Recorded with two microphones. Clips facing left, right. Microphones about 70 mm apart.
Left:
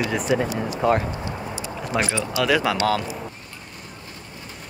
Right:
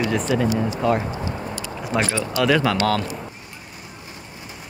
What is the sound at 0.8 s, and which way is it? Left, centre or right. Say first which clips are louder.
Speech: left 1 dB; left.